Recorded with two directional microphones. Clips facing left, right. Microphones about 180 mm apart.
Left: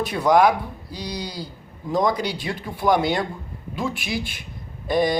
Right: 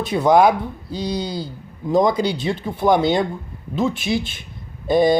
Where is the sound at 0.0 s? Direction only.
25° right (ahead or behind).